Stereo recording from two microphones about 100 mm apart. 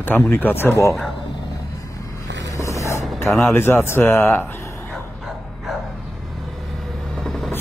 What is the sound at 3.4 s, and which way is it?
A man's voice, 25° left (ahead or behind).